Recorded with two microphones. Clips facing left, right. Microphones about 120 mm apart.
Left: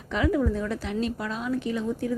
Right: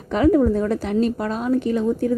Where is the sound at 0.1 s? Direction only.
45° right (ahead or behind).